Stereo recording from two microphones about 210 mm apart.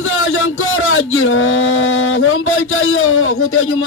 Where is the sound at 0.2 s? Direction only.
75° left (ahead or behind).